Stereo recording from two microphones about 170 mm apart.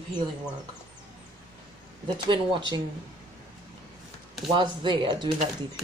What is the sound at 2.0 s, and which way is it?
Speech, 30° right (ahead or behind).